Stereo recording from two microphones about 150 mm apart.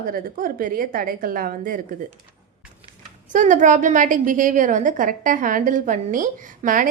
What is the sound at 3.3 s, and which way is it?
A woman's voice, 55° right (ahead or behind).